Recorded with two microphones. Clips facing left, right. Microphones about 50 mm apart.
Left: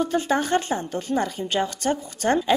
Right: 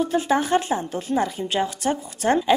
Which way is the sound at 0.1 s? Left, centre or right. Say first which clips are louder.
Right 2 dB; centre.